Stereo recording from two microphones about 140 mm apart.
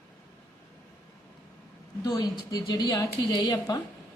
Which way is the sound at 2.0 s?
25° left (ahead or behind).